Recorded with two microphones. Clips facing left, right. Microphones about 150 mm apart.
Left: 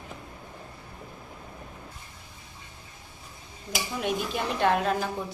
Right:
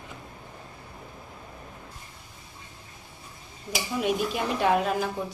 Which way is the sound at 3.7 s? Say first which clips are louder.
Right 3 dB; 5° right (ahead or behind).